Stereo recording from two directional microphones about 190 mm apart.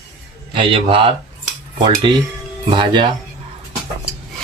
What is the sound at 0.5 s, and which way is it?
Speech, 25° right (ahead or behind).